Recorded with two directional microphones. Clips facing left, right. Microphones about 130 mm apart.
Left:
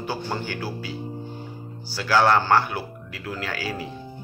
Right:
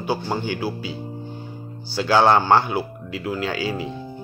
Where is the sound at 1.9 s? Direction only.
20° right (ahead or behind).